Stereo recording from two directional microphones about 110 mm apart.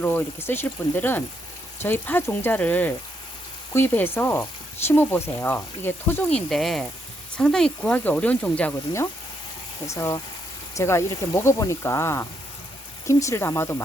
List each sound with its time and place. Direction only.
0.0 s speech: 15° left (ahead or behind)
6.2 s speech: 5° left (ahead or behind)
9.8 s speech: 25° left (ahead or behind)